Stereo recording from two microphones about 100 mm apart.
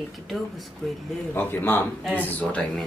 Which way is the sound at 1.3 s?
20° left (ahead or behind).